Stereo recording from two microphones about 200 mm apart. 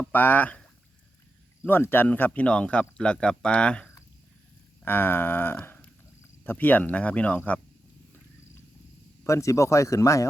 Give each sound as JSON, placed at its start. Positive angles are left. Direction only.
{"t": 0.0, "sound": "speech", "side_deg": 10}
{"t": 1.6, "sound": "speech", "side_deg": 10}
{"t": 9.2, "sound": "speech", "side_deg": 15}